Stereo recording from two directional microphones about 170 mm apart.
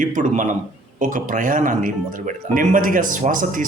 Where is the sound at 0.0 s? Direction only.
50° right (ahead or behind).